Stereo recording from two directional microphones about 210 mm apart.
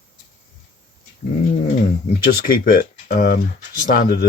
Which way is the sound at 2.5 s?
45° left (ahead or behind).